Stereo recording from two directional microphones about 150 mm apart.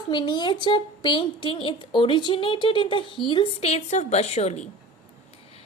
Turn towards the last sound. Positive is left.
turn(degrees=45)  # may be behind; listen again after turning